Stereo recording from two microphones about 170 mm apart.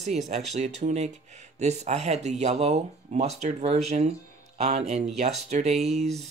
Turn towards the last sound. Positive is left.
turn(degrees=-40)  # may be behind; listen again after turning